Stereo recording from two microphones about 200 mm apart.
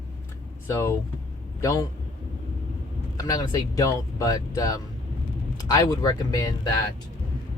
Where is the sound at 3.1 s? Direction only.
20° left (ahead or behind).